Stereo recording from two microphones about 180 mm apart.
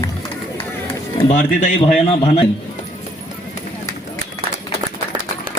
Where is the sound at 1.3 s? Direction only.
40° left (ahead or behind).